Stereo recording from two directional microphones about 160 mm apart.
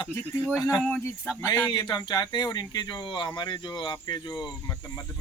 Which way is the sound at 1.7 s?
30° left (ahead or behind).